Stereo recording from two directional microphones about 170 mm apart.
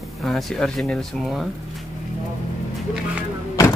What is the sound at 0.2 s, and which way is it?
Speech, centre (ahead or behind).